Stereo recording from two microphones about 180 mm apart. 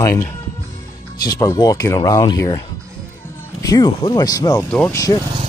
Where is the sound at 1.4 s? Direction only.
20° left (ahead or behind).